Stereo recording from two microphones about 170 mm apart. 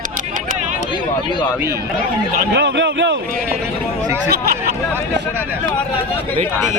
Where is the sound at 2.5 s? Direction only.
90° right.